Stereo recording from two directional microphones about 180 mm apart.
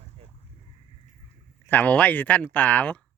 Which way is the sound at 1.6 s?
10° left (ahead or behind).